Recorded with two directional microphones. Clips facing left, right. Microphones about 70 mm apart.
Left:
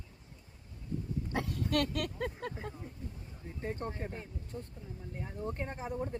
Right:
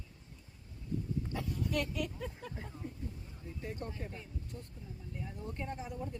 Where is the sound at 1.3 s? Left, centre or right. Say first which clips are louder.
Left 6 dB; left.